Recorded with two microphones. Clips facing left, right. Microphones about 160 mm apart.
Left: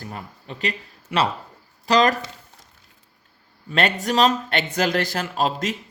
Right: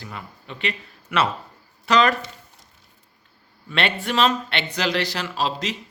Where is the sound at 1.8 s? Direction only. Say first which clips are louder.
Left 1 dB; 35° left (ahead or behind).